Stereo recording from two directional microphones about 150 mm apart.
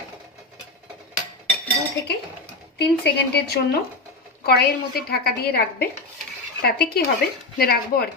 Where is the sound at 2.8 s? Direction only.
90° left.